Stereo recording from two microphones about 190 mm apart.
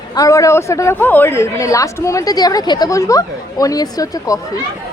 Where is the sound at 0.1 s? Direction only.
15° left (ahead or behind).